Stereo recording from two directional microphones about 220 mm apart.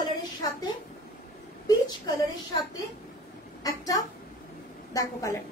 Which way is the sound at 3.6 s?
15° left (ahead or behind).